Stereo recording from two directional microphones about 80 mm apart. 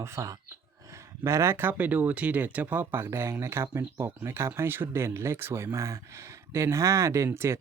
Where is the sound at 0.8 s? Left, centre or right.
Right.